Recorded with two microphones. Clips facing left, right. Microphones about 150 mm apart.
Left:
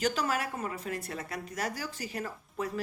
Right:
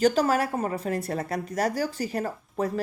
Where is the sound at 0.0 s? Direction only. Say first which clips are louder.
Right 9 dB; 35° right (ahead or behind).